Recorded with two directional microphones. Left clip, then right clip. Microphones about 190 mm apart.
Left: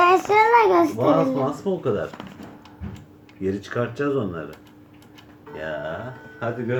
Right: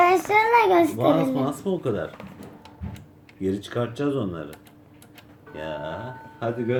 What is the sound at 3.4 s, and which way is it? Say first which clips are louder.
Speech: left 1 dB; 25° right (ahead or behind).